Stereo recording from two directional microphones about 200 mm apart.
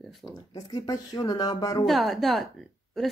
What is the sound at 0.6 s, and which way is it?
Speech, 20° left (ahead or behind).